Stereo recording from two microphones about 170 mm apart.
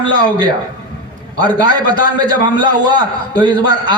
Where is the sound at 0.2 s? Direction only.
25° right (ahead or behind).